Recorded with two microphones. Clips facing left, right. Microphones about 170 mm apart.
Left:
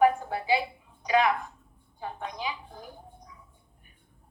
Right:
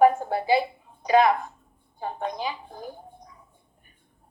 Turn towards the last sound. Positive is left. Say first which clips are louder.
# right 7 dB
turn(degrees=-45)  # may be behind; listen again after turning